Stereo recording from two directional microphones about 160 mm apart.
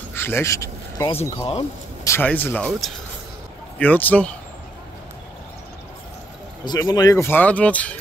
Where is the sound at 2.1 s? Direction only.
10° left (ahead or behind).